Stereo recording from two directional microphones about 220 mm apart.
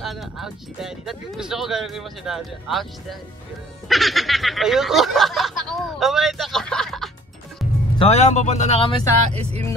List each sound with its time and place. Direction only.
0.0 s speech: centre (ahead or behind)
8.0 s speech: 30° left (ahead or behind)
9.4 s speech: 30° right (ahead or behind)